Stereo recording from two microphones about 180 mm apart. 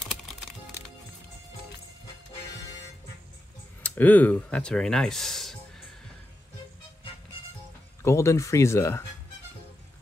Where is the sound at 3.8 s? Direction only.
10° left (ahead or behind).